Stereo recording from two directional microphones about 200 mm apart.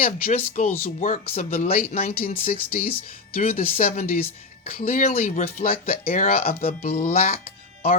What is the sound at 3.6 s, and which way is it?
Speech, 45° left (ahead or behind).